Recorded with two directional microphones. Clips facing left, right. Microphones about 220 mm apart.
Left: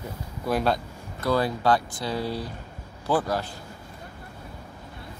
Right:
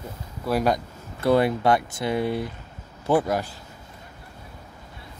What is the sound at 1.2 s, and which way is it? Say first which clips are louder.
Speech: right 4 dB; 25° right (ahead or behind).